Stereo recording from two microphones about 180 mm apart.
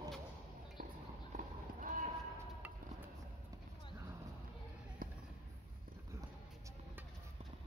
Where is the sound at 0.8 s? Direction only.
55° right (ahead or behind).